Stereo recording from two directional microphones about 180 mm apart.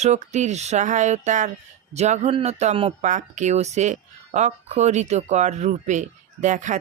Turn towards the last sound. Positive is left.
turn(degrees=-45)  # may be behind; listen again after turning